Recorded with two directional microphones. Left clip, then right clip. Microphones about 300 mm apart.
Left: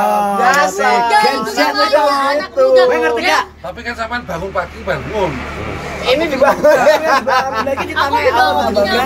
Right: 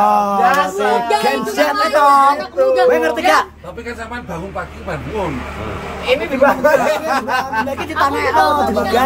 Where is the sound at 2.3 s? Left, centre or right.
Centre.